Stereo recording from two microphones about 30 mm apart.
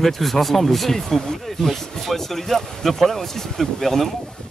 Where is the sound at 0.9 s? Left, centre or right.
Centre.